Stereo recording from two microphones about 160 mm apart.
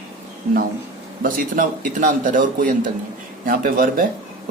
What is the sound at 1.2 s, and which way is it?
A man's voice, 55° right (ahead or behind).